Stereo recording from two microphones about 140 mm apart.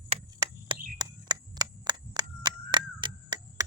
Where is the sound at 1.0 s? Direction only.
30° right (ahead or behind).